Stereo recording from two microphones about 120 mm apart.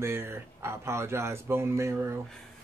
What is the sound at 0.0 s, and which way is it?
Speech, 20° right (ahead or behind).